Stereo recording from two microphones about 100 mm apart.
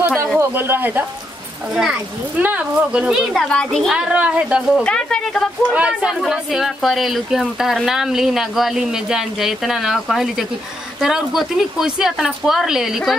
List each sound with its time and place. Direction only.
0.4 s a child's voice: 20° right (ahead or behind)
3.3 s speech: 5° left (ahead or behind)
3.9 s a child's voice: 10° right (ahead or behind)
4.8 s a woman's voice: 10° left (ahead or behind)
5.7 s speech: 10° right (ahead or behind)